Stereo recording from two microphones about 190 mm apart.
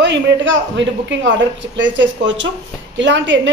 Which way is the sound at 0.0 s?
70° right (ahead or behind).